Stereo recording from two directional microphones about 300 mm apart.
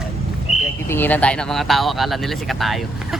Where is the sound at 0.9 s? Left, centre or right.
Centre.